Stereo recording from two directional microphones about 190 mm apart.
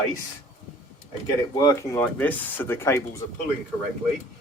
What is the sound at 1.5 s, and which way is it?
Speech, 15° left (ahead or behind).